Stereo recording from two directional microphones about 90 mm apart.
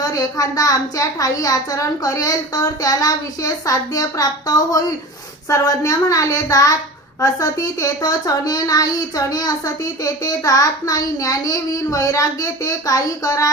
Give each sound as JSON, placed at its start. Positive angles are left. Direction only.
{"t": 0.0, "sound": "speech", "side_deg": 40}
{"t": 5.5, "sound": "child singing", "side_deg": 40}
{"t": 7.2, "sound": "speech", "side_deg": 40}